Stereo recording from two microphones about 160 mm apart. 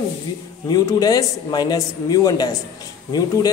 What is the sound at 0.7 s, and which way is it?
Speech, 25° left (ahead or behind).